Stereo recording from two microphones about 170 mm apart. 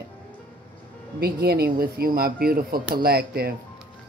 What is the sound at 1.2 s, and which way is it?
Speech, 65° right (ahead or behind).